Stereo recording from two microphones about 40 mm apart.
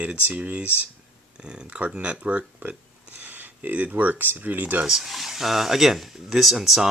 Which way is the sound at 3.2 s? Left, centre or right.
Right.